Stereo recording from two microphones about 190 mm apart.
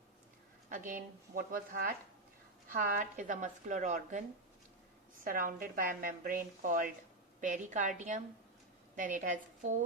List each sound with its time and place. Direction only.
0.7 s a woman's voice: 45° right (ahead or behind)
5.2 s a woman's voice: 45° right (ahead or behind)